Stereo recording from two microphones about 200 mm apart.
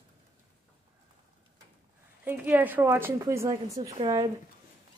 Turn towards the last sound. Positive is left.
turn(degrees=-20)  # may be behind; listen again after turning